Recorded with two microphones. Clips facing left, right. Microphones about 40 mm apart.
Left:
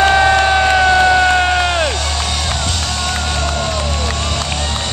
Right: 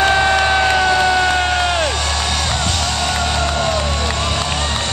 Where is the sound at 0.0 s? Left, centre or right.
Centre.